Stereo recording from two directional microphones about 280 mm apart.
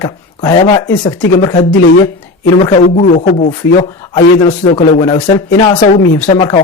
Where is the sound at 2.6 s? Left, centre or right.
Centre.